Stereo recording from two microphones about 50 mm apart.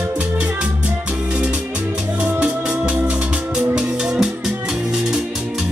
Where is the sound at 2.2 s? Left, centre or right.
Centre.